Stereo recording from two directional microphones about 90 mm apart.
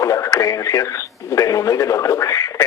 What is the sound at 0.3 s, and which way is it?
A man's voice, 35° left (ahead or behind).